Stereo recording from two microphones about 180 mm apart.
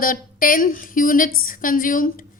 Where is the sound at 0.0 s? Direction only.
50° left (ahead or behind).